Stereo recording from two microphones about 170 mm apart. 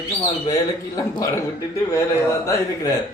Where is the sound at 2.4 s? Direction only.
15° left (ahead or behind).